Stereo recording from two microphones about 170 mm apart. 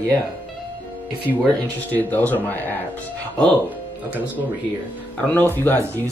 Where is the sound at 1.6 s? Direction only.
10° left (ahead or behind).